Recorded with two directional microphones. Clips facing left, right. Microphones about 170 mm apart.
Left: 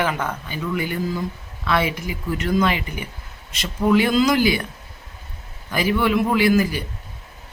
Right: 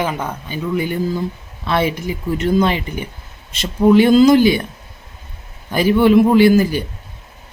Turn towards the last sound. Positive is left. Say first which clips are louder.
# right 6 dB
turn(degrees=-30)  # may be behind; listen again after turning